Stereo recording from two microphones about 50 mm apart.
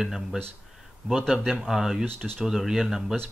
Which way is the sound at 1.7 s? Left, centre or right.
Centre.